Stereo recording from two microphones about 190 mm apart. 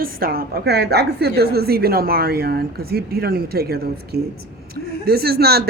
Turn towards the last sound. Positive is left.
turn(degrees=-55)  # may be behind; listen again after turning